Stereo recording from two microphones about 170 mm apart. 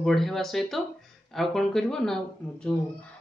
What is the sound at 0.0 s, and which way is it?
A man's voice, centre (ahead or behind).